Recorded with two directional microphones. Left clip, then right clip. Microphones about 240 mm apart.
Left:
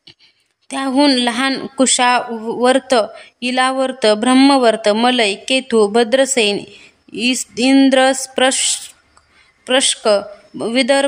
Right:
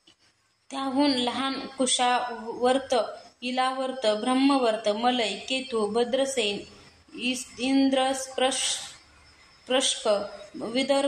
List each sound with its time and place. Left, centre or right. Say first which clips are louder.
0.7 s speech: left 11 dB; left